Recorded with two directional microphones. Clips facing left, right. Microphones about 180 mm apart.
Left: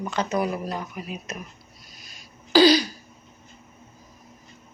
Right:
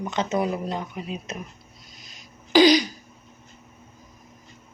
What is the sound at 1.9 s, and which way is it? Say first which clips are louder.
Throat clearing: right 1 dB; 20° right (ahead or behind).